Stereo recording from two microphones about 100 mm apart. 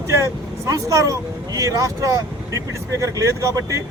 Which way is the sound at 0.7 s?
35° right (ahead or behind).